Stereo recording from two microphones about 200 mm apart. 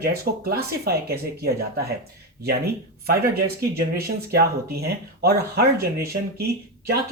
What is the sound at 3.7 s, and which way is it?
Speech, 50° right (ahead or behind).